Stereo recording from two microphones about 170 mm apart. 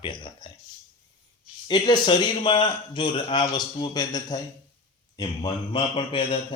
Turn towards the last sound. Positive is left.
turn(degrees=30)  # may be behind; listen again after turning